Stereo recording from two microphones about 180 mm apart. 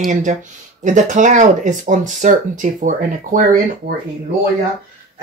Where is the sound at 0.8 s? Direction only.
45° right (ahead or behind).